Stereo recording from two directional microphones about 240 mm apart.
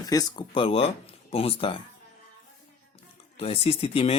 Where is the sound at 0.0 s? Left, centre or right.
Centre.